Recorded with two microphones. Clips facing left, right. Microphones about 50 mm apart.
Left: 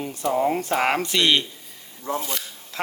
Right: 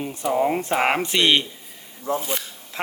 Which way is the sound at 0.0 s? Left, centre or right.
Centre.